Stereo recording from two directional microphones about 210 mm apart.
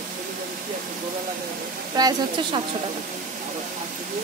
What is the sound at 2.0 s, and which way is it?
Speech, 20° right (ahead or behind).